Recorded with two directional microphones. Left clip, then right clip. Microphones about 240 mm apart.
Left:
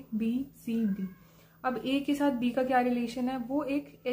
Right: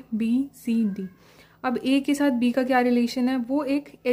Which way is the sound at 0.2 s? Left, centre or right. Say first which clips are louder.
Right 8 dB; right.